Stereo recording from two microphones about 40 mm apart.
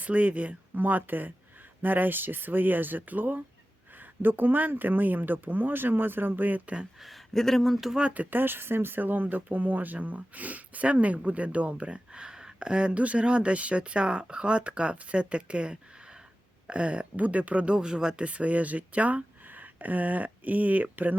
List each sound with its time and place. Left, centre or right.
0.0 s speech: right
0.8 s speech: right
7.3 s speech: centre
8.3 s speech: right
17.7 s speech: centre
18.3 s speech: right